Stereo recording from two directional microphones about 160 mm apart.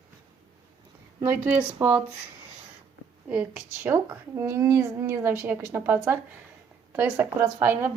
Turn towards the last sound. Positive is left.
turn(degrees=-10)  # may be behind; listen again after turning